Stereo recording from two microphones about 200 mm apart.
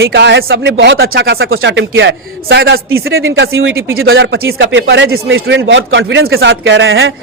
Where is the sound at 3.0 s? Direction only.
80° right.